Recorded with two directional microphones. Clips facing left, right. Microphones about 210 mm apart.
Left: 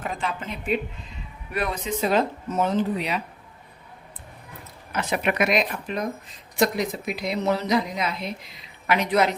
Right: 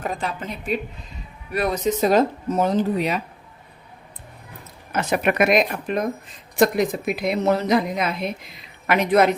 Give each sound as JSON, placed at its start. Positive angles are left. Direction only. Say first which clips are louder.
{"t": 0.0, "sound": "a woman's voice", "louder": "right 2 dB", "side_deg": -40}
{"t": 4.9, "sound": "a woman's voice", "louder": "right 4 dB", "side_deg": -45}